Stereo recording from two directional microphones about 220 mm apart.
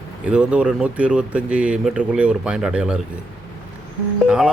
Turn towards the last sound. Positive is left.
turn(degrees=-5)  # may be behind; listen again after turning